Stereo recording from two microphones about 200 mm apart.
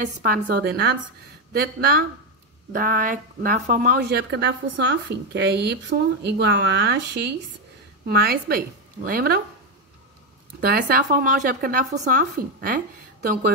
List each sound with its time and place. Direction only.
0.2 s speech: 50° right (ahead or behind)
4.1 s a woman's voice: 60° right (ahead or behind)
10.6 s speech: 50° right (ahead or behind)